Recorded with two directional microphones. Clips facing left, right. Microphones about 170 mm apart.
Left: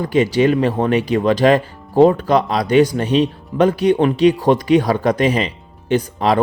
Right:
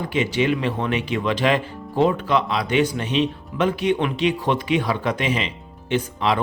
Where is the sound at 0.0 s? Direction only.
40° left (ahead or behind).